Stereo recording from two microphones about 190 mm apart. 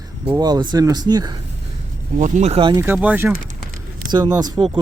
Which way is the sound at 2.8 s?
10° right (ahead or behind).